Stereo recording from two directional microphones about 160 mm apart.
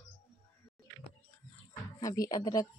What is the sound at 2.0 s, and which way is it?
Speech, 20° left (ahead or behind).